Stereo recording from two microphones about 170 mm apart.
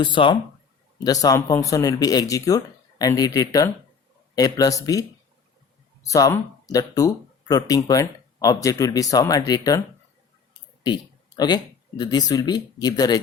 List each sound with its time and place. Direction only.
0.0 s speech: 30° left (ahead or behind)
10.8 s speech: 25° left (ahead or behind)